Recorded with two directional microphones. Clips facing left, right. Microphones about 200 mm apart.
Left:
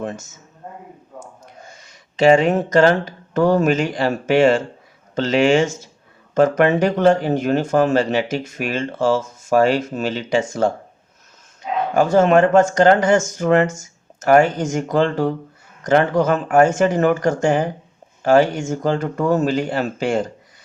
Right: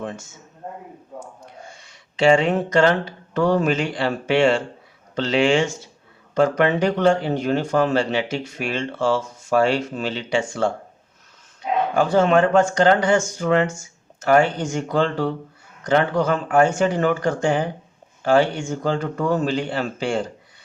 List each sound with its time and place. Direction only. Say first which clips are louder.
0.0 s speech: left 3 dB; 45° left (ahead or behind)
1.7 s speech: left 2 dB; 45° left (ahead or behind)
11.9 s speech: left 4 dB; 45° left (ahead or behind)